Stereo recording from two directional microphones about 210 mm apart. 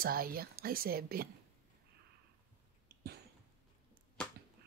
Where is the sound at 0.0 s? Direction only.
45° right (ahead or behind).